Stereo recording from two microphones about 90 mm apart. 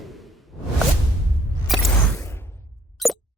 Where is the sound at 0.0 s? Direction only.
Centre (ahead or behind).